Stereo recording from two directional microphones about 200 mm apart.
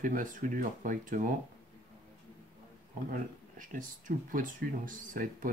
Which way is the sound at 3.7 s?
40° right (ahead or behind).